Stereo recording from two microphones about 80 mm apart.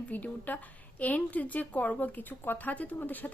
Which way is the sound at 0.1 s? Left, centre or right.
Left.